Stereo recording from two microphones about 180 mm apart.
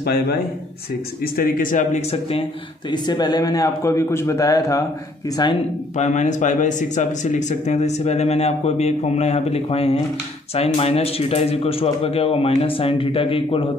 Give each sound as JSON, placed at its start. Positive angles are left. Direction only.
{"t": 0.0, "sound": "a man's voice", "side_deg": 60}
{"t": 5.9, "sound": "speech", "side_deg": 40}